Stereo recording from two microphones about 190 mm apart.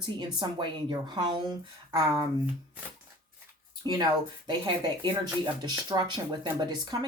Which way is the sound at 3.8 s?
20° right (ahead or behind).